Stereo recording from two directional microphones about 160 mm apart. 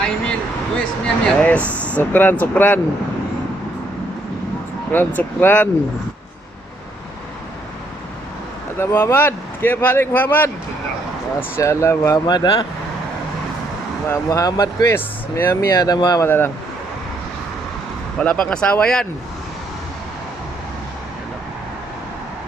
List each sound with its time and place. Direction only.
0.8 s speech: 5° left (ahead or behind)
4.9 s speech: 10° left (ahead or behind)
8.8 s speech: 15° left (ahead or behind)
11.5 s speech: 20° left (ahead or behind)
14.1 s speech: 20° left (ahead or behind)
18.2 s speech: 5° left (ahead or behind)